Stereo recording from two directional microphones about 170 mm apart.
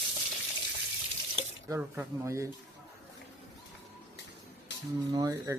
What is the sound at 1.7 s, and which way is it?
Speech, 20° right (ahead or behind).